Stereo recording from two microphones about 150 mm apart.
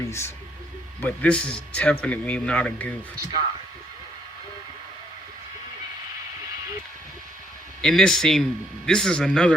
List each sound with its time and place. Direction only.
0.0 s a man's voice: 20° left (ahead or behind)
1.0 s a man's voice: 10° left (ahead or behind)
7.8 s speech: 5° left (ahead or behind)